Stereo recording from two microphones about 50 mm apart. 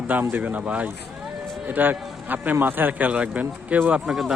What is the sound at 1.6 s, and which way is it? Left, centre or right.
A man's voice, right.